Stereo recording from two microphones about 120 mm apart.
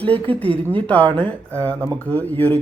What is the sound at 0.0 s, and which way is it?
Speech, 15° left (ahead or behind).